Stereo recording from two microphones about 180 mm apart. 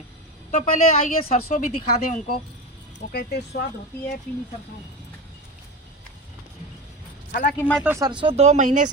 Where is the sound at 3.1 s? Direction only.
65° left (ahead or behind).